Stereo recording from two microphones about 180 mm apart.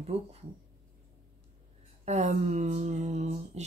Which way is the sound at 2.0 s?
40° right (ahead or behind).